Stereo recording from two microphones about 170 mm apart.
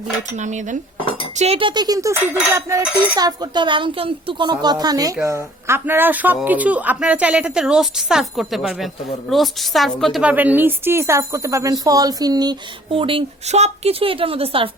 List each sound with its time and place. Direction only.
0.2 s speech: 45° right (ahead or behind)
0.9 s cutlery: 30° left (ahead or behind)
1.4 s a woman's voice: 35° right (ahead or behind)